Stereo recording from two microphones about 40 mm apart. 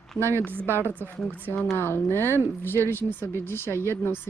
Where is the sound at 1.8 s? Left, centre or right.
Left.